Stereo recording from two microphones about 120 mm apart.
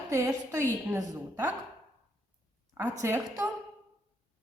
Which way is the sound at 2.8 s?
20° right (ahead or behind).